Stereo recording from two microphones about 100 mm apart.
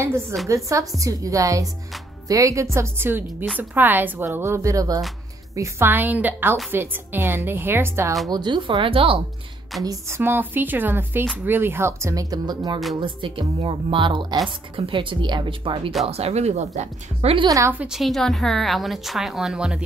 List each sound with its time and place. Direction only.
0.7 s a woman's voice: 30° right (ahead or behind)
5.6 s a woman's voice: 25° right (ahead or behind)
8.3 s speech: 50° right (ahead or behind)
9.8 s a woman's voice: 25° right (ahead or behind); by 12.8 s 45° right (ahead or behind)
13.0 s speech: 55° right (ahead or behind)
16.1 s a woman's voice: 90° right
17.5 s speech: 30° right (ahead or behind)
17.7 s a woman's voice: 5° right (ahead or behind)